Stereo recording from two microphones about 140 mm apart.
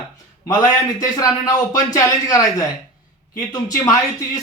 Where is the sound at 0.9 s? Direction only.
25° left (ahead or behind).